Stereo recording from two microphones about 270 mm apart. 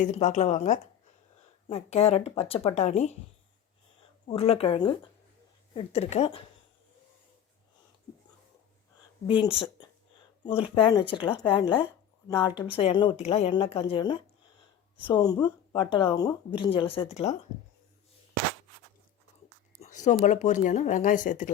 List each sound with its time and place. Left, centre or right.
0.0 s speech: left
4.3 s speech: left
9.2 s speech: centre
19.8 s speech: left